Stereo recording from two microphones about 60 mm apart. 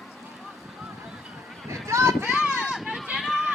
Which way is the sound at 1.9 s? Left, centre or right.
Right.